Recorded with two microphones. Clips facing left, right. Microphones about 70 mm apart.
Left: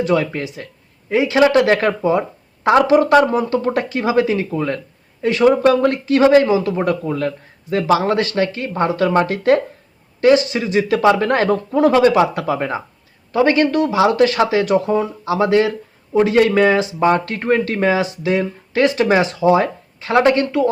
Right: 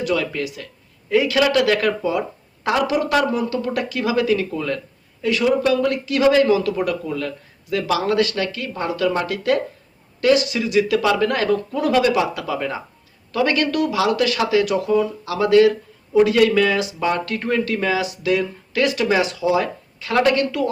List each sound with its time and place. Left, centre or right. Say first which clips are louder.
0.0 s speech: left 4 dB; left